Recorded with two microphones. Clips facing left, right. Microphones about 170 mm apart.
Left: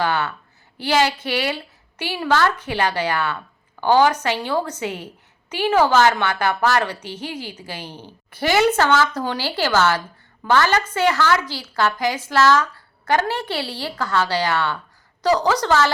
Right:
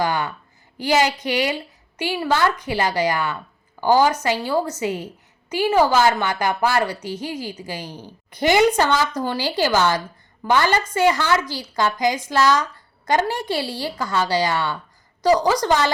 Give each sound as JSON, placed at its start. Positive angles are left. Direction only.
{"t": 0.0, "sound": "a woman's voice", "side_deg": -10}